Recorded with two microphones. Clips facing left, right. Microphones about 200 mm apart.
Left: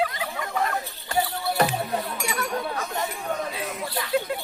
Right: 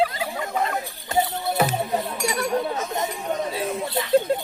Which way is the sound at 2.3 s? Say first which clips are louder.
Right 5 dB; 25° right (ahead or behind).